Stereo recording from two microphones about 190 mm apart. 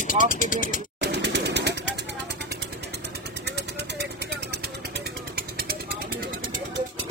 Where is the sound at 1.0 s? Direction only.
65° right (ahead or behind).